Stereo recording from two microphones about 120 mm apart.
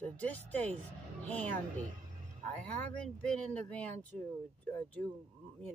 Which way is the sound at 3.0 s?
5° left (ahead or behind).